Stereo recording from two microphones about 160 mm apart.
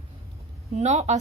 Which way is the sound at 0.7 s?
45° right (ahead or behind).